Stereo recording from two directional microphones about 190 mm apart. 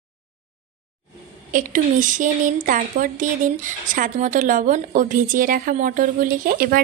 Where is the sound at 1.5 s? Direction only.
45° right (ahead or behind).